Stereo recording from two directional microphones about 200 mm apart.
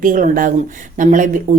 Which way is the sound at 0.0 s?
40° right (ahead or behind).